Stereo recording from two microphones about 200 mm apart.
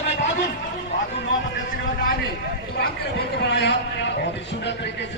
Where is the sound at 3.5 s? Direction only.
60° left (ahead or behind).